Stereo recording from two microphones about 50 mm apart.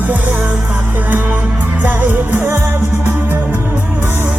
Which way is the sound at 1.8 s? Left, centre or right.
Right.